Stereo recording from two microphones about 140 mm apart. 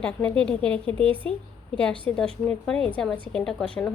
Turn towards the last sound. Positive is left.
turn(degrees=5)  # may be behind; listen again after turning